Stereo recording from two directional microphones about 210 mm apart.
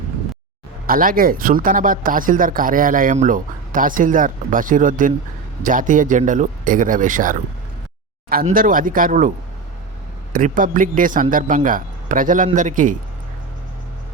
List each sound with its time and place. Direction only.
0.9 s speech: 45° right (ahead or behind)
10.3 s speech: 40° right (ahead or behind)